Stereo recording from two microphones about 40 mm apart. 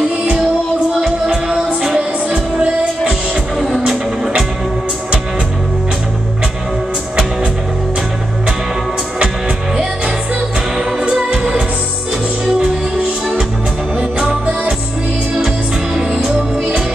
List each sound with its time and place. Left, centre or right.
1.2 s music: right
3.5 s music: centre
10.8 s music: centre
16.0 s music: centre